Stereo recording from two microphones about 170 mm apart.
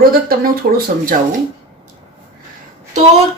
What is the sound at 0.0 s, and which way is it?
Speech, 60° right (ahead or behind).